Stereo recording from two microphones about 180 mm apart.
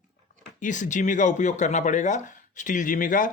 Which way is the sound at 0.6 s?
45° left (ahead or behind).